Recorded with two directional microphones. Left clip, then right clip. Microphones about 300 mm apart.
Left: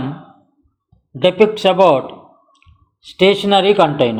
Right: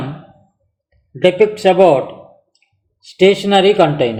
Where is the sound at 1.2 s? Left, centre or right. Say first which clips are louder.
Right 1 dB; left.